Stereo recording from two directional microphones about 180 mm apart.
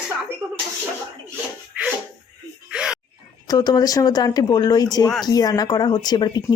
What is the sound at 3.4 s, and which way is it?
Speech, 20° left (ahead or behind).